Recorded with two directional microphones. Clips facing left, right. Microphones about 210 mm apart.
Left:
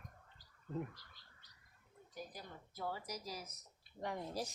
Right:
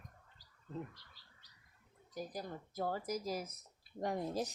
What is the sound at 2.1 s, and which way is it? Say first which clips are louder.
A woman's voice: right 7 dB; 45° right (ahead or behind).